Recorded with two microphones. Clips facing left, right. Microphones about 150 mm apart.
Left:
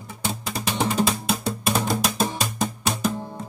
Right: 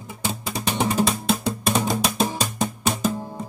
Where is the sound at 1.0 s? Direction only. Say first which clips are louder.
Right 2 dB; centre (ahead or behind).